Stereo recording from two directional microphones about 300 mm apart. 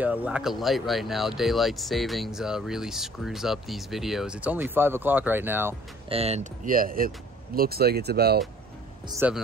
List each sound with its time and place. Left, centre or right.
0.0 s speech: centre
6.0 s speech: centre
9.1 s speech: centre